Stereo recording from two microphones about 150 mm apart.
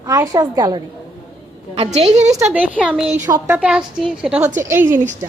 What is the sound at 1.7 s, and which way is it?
Speech, 45° right (ahead or behind).